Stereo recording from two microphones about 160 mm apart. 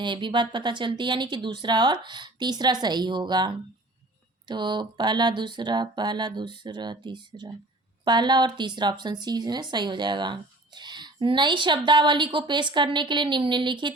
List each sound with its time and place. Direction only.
0.0 s speech: 30° right (ahead or behind)